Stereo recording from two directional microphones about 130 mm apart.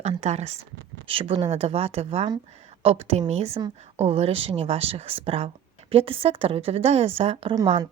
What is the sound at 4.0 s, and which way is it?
Speech, 55° right (ahead or behind).